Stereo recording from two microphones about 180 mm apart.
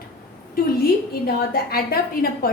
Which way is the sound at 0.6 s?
55° left (ahead or behind).